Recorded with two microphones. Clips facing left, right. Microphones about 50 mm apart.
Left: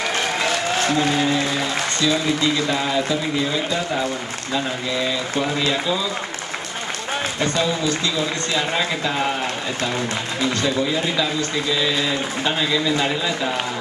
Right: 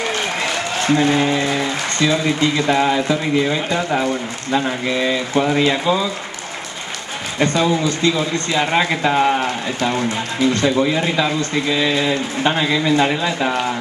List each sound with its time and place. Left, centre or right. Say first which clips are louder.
0.8 s a man's voice: right 6 dB; right
7.3 s a man's voice: right 7 dB; right